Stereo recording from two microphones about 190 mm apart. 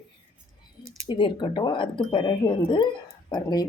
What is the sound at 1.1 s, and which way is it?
Speech, 25° left (ahead or behind).